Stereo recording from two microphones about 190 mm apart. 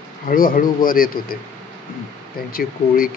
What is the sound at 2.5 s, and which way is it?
Speech, 50° left (ahead or behind).